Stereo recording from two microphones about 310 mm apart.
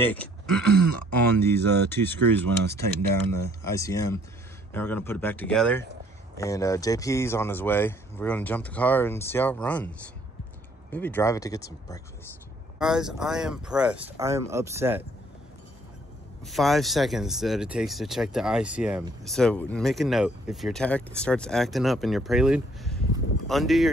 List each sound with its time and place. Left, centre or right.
0.0 s speech: centre
10.9 s speech: centre
12.7 s speech: centre
16.4 s speech: centre